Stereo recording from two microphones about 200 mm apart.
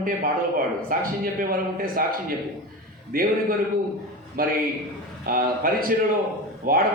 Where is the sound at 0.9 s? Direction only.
45° right (ahead or behind).